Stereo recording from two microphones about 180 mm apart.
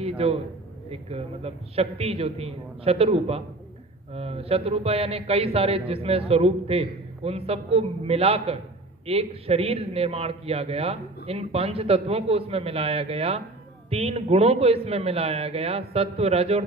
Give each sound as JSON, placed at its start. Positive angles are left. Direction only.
{"t": 0.2, "sound": "a man's voice", "side_deg": -35}